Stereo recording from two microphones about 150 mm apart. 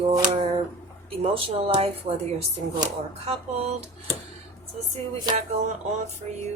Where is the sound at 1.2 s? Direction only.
40° right (ahead or behind).